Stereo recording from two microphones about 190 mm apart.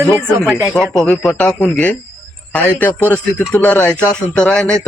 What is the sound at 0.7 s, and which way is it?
A man's voice, 5° left (ahead or behind).